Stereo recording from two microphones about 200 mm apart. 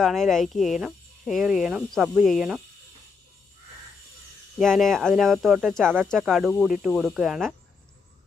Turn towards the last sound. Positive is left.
turn(degrees=0)  # may be behind; listen again after turning